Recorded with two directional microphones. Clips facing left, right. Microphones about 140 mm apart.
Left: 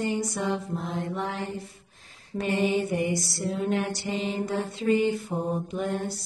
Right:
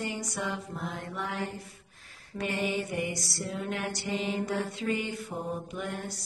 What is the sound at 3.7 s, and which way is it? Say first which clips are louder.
Mantra: left 5 dB; 30° left (ahead or behind).